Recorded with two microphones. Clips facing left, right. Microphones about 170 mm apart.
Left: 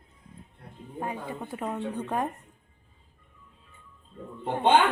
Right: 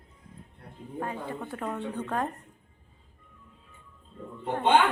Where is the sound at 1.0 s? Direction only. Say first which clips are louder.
Even; 15° left (ahead or behind).